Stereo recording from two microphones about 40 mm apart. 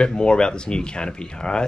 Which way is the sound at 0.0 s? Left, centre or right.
Left.